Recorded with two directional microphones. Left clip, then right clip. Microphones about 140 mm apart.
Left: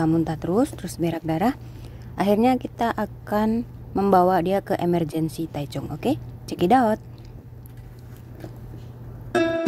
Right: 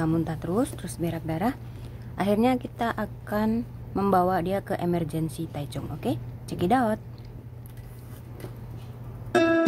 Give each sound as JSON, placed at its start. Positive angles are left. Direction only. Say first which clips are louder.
{"t": 0.2, "sound": "a woman's voice", "louder": "left 5 dB", "side_deg": 35}
{"t": 2.1, "sound": "a woman's voice", "louder": "left 4 dB", "side_deg": 35}
{"t": 3.5, "sound": "a woman's voice", "louder": "left 4 dB", "side_deg": 20}
{"t": 4.1, "sound": "a woman's voice", "louder": "left 5 dB", "side_deg": 45}
{"t": 9.3, "sound": "music", "louder": "right 1 dB", "side_deg": 0}